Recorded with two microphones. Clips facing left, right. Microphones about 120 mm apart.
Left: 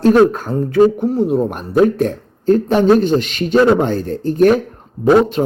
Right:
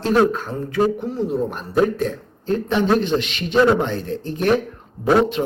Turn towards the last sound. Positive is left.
turn(degrees=40)  # may be behind; listen again after turning